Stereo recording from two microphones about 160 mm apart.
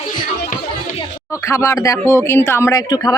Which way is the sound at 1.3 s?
20° left (ahead or behind).